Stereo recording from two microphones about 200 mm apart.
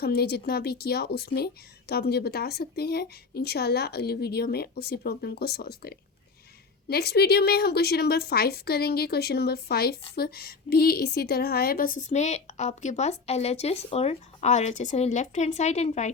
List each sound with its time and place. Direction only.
0.0 s a woman's voice: 50° left (ahead or behind); by 16.1 s 35° left (ahead or behind)